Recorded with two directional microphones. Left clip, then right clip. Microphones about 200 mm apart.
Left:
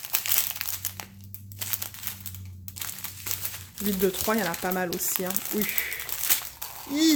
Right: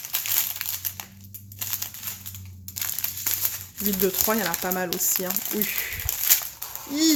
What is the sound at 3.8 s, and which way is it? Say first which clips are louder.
Speech: right 1 dB; centre (ahead or behind).